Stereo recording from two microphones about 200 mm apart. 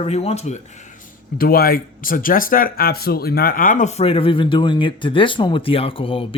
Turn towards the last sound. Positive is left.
turn(degrees=25)  # may be behind; listen again after turning